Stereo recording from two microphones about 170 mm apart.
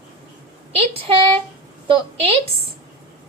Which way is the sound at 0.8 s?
35° right (ahead or behind).